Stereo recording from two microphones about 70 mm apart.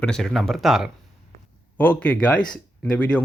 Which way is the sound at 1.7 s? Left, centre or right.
Left.